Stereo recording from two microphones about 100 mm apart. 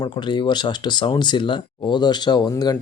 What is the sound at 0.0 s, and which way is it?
Speech, 50° left (ahead or behind).